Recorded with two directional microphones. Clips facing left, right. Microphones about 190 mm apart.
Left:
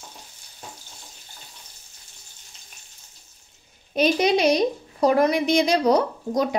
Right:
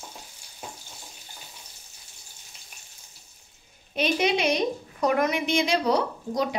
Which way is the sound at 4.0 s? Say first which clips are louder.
Left 5 dB; 40° left (ahead or behind).